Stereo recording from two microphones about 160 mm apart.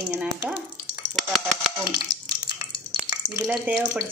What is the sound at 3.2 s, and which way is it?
Frying, 30° left (ahead or behind).